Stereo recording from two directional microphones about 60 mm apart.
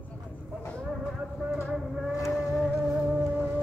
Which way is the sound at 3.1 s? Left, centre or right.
Right.